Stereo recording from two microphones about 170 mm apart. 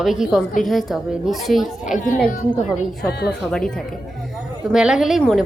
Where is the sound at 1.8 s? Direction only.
50° left (ahead or behind).